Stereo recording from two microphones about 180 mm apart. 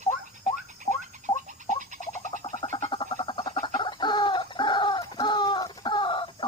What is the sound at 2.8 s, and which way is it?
Frog, 25° left (ahead or behind).